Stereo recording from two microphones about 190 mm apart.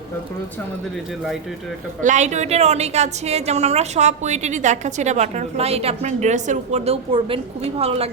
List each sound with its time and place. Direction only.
2.0 s a woman's voice: 40° right (ahead or behind)